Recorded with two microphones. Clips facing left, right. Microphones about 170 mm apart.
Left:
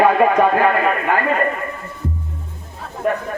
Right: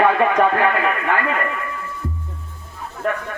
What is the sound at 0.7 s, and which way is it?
Speech, 35° left (ahead or behind).